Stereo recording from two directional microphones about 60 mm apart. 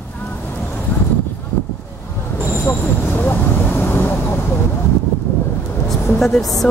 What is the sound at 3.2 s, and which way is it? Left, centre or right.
Vehicle, left.